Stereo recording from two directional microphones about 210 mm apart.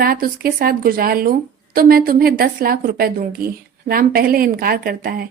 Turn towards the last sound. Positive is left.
turn(degrees=-45)  # may be behind; listen again after turning